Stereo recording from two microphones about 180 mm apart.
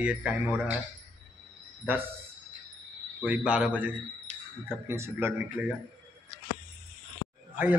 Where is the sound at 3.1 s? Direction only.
10° right (ahead or behind).